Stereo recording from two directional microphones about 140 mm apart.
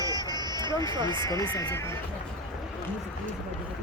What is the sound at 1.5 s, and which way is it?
Speech, 20° left (ahead or behind).